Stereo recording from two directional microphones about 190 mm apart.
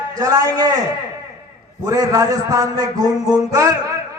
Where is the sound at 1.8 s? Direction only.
20° right (ahead or behind).